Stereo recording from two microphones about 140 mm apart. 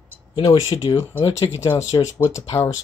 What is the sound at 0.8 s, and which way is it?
Speech, 40° left (ahead or behind).